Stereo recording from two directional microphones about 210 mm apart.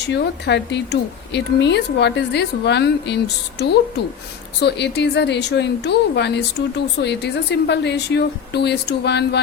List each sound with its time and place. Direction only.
0.1 s a woman's voice: 55° left (ahead or behind)